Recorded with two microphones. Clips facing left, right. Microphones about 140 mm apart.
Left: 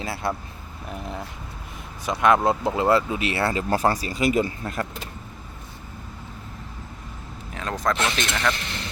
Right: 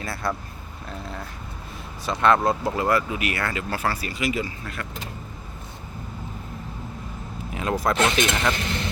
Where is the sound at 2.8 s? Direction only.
25° left (ahead or behind).